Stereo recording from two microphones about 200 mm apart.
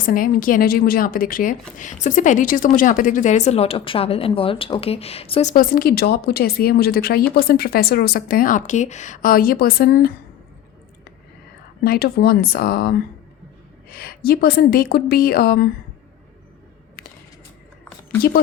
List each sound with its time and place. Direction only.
0.0 s a woman's voice: 45° left (ahead or behind)
11.8 s a woman's voice: 50° left (ahead or behind)